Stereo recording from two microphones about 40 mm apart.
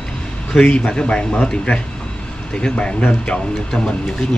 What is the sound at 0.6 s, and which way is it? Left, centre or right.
Speech, left.